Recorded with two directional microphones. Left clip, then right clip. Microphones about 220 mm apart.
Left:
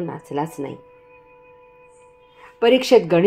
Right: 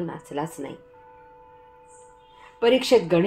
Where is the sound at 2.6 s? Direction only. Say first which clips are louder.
Left 4 dB; 35° left (ahead or behind).